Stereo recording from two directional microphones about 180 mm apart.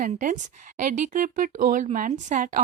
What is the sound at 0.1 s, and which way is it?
Speech, 45° right (ahead or behind).